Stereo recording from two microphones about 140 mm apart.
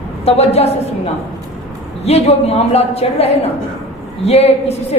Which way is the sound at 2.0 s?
50° left (ahead or behind).